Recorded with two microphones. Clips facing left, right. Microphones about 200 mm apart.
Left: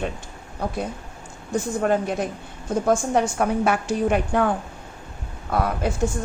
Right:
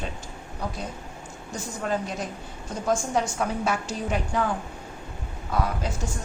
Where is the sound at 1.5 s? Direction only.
55° left (ahead or behind).